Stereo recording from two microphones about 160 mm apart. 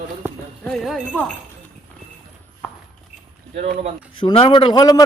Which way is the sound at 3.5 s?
40° right (ahead or behind).